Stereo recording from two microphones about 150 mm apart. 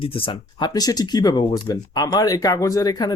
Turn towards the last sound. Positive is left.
turn(degrees=25)  # may be behind; listen again after turning